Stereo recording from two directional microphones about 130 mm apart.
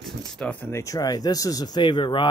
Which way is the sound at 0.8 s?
30° left (ahead or behind).